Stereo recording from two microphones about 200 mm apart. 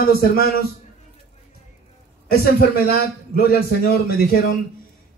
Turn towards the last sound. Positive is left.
turn(degrees=45)  # may be behind; listen again after turning